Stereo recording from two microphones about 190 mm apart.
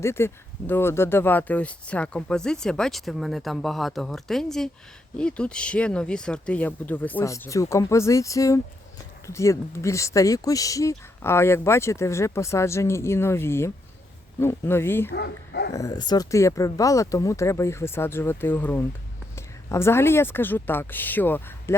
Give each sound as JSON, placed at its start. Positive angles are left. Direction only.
{"t": 0.0, "sound": "speech", "side_deg": 15}
{"t": 15.1, "sound": "speech", "side_deg": 60}
{"t": 15.7, "sound": "speech", "side_deg": 20}